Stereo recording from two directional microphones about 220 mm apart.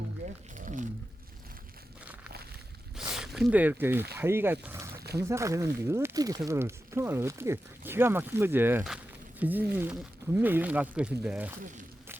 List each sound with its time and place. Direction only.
0.6 s wild animals: 35° right (ahead or behind)
3.0 s speech: centre (ahead or behind)
4.9 s a sound: 45° right (ahead or behind)
5.3 s speech: 15° right (ahead or behind)